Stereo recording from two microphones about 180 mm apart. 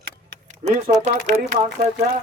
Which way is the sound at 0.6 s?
40° right (ahead or behind).